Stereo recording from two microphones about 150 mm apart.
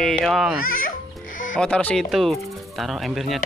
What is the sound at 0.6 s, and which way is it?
Speech, 65° left (ahead or behind).